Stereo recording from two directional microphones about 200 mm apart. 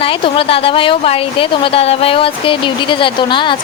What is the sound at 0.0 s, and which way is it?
Speech, 25° left (ahead or behind).